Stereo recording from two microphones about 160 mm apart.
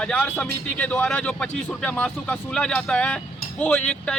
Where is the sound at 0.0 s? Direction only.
5° left (ahead or behind).